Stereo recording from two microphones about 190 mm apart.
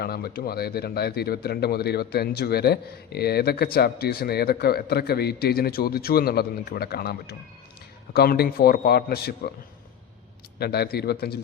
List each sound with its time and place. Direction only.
0.0 s speech: 55° left (ahead or behind)
10.6 s speech: 55° left (ahead or behind)